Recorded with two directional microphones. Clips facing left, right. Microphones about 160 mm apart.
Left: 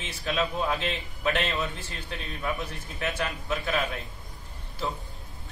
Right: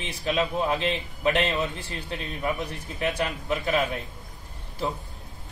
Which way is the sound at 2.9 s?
20° right (ahead or behind).